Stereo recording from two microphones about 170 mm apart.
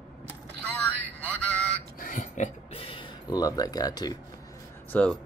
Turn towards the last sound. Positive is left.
turn(degrees=10)  # may be behind; listen again after turning